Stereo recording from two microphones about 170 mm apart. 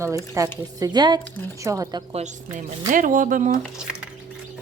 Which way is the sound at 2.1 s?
45° right (ahead or behind).